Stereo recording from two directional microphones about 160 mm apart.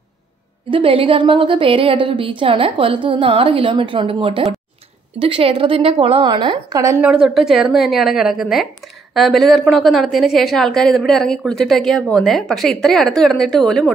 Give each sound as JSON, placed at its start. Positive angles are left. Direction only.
{"t": 0.7, "sound": "speech", "side_deg": -35}
{"t": 7.0, "sound": "a woman's voice", "side_deg": -5}